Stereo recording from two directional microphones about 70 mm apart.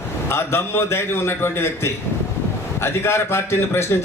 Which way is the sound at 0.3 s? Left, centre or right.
Left.